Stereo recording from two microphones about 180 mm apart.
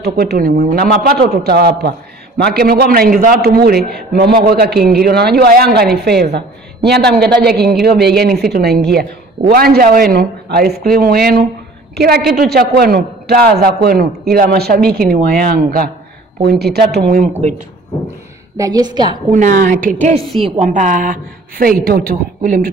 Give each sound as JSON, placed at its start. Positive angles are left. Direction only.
{"t": 0.0, "sound": "a man's voice", "side_deg": -60}
{"t": 18.6, "sound": "a woman's voice", "side_deg": -20}
{"t": 19.3, "sound": "a woman's voice", "side_deg": -45}